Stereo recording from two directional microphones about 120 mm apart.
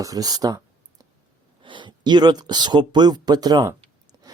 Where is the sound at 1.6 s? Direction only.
40° right (ahead or behind).